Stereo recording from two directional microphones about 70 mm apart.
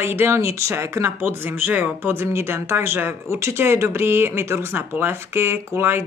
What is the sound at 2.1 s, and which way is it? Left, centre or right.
Speech, right.